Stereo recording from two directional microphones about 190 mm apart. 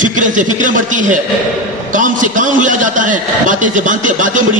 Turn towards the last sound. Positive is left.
turn(degrees=-40)  # may be behind; listen again after turning